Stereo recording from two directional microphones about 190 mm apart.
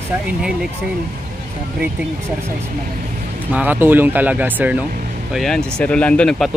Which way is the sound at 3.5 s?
10° right (ahead or behind).